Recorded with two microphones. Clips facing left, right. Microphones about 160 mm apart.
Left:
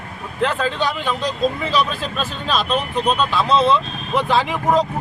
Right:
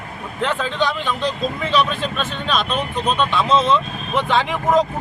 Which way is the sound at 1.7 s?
35° left (ahead or behind).